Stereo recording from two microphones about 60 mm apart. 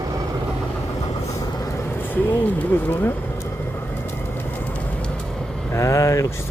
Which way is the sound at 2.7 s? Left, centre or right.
Left.